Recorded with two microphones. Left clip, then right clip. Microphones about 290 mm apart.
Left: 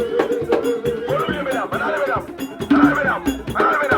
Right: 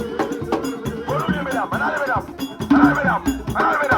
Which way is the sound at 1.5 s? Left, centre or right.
Right.